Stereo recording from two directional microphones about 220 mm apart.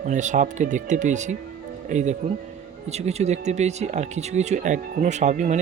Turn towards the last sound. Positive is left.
turn(degrees=-35)  # may be behind; listen again after turning